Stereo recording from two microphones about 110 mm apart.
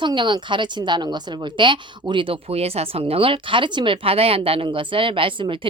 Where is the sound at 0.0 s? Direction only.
45° right (ahead or behind).